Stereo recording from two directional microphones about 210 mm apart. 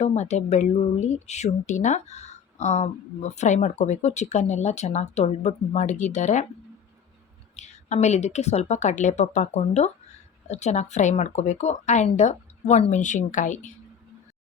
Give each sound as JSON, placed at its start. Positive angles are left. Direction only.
{"t": 0.0, "sound": "a woman's voice", "side_deg": 30}
{"t": 7.5, "sound": "a woman's voice", "side_deg": 35}